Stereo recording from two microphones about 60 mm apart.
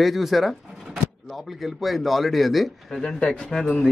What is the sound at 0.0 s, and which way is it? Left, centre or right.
Speech, centre.